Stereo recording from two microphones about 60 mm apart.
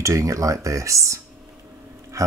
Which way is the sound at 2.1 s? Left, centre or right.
Right.